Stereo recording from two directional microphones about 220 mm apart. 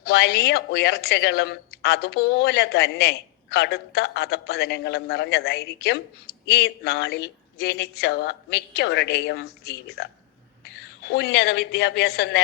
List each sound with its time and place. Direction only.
0.0 s a woman's voice: 45° left (ahead or behind)
11.1 s a woman's voice: 50° left (ahead or behind)